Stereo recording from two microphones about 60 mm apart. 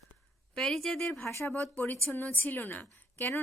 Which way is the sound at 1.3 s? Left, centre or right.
Left.